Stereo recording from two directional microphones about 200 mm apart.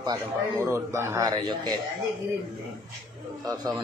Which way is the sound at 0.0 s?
20° right (ahead or behind).